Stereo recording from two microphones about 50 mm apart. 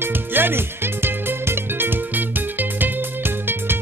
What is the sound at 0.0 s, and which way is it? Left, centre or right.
Music, right.